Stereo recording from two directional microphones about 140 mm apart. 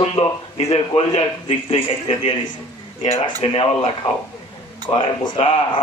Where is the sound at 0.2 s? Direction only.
50° left (ahead or behind).